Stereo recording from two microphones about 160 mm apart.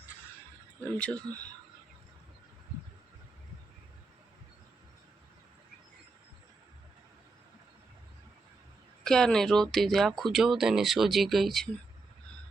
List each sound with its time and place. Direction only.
0.9 s speech: 10° left (ahead or behind)
9.0 s speech: 5° left (ahead or behind)